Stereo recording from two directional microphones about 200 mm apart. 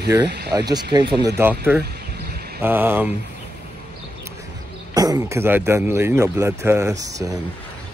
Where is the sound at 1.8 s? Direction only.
55° right (ahead or behind).